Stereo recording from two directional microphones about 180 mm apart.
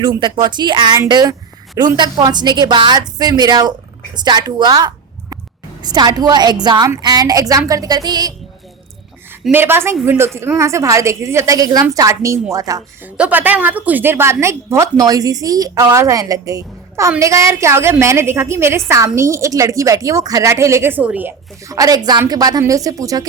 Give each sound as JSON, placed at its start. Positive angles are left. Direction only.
{"t": 0.2, "sound": "a woman's voice", "side_deg": -25}
{"t": 9.4, "sound": "a woman's voice", "side_deg": -10}